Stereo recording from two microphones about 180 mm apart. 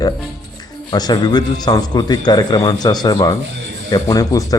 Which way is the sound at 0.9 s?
20° left (ahead or behind).